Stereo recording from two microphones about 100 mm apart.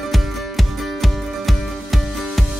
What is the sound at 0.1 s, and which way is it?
Music, centre (ahead or behind).